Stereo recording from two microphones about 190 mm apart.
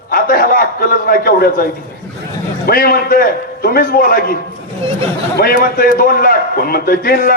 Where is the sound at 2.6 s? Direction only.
50° left (ahead or behind).